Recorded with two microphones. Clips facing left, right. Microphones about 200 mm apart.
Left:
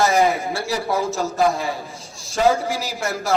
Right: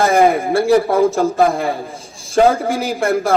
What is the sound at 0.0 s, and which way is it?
A man's voice, 55° right (ahead or behind).